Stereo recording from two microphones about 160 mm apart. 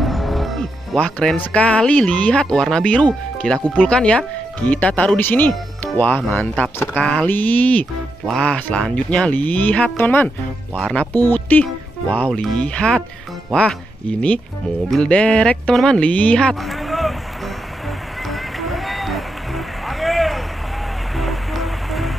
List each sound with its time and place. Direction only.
0.0 s speech: centre (ahead or behind)
18.3 s rowboat: centre (ahead or behind)
21.2 s music: centre (ahead or behind)